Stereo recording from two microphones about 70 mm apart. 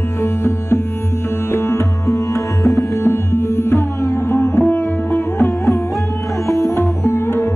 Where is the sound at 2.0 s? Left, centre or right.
Left.